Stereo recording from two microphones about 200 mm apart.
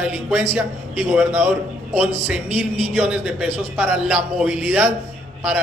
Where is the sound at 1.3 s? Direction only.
35° right (ahead or behind).